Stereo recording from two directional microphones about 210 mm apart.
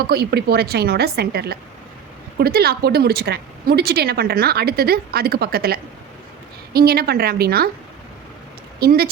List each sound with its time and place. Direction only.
0.0 s a woman's voice: 50° right (ahead or behind)
8.8 s a woman's voice: 45° right (ahead or behind)